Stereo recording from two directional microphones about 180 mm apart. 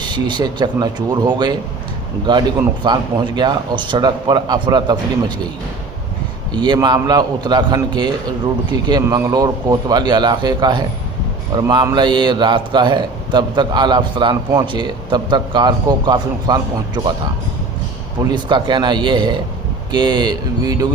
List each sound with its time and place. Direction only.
0.0 s a man's voice: 25° right (ahead or behind)
6.5 s a man's voice: 25° right (ahead or behind)
18.3 s a man's voice: 25° right (ahead or behind)